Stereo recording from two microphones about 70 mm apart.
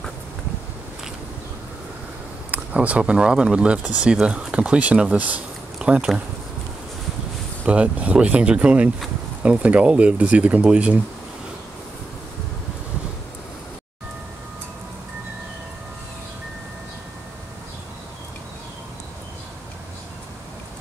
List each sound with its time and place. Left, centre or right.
2.5 s speech: centre
7.6 s speech: centre